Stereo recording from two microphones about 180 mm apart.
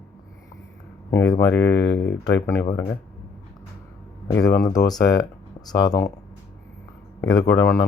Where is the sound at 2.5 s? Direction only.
15° left (ahead or behind).